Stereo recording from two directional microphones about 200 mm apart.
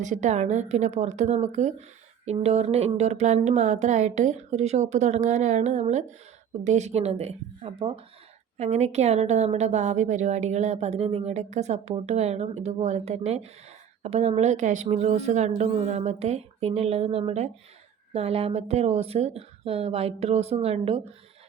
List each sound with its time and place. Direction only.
0.0 s a woman's voice: 35° right (ahead or behind)